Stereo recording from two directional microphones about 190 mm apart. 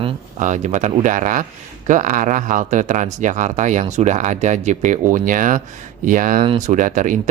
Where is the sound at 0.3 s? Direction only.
40° right (ahead or behind).